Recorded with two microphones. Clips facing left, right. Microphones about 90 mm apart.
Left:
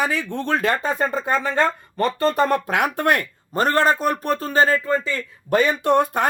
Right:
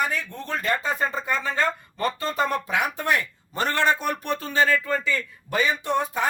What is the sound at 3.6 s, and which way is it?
Speech, 40° left (ahead or behind).